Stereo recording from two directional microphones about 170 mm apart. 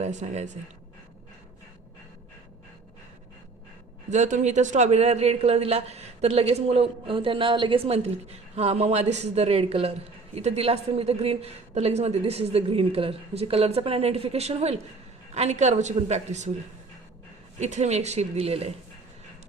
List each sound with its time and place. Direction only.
0.0 s speech: 40° right (ahead or behind)
4.1 s a man's voice: 45° right (ahead or behind)
17.6 s a man's voice: 40° right (ahead or behind)